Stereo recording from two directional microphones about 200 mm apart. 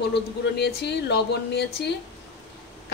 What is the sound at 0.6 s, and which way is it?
A woman's voice, 55° left (ahead or behind).